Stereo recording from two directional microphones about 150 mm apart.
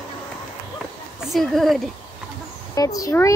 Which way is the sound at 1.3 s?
Centre (ahead or behind).